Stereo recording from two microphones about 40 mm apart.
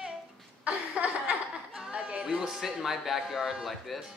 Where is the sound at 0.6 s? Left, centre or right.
Right.